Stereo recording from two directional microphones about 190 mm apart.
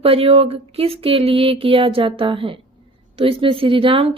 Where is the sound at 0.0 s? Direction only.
30° right (ahead or behind).